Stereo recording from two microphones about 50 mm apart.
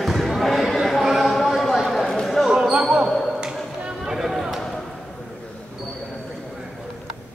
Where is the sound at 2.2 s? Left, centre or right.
Centre.